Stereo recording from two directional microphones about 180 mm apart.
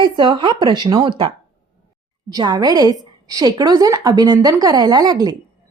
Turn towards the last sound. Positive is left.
turn(degrees=-20)  # may be behind; listen again after turning